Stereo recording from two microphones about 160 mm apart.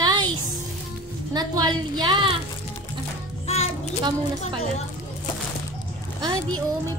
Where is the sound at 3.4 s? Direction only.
40° left (ahead or behind).